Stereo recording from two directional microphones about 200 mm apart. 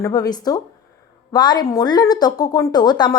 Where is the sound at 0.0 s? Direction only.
20° left (ahead or behind).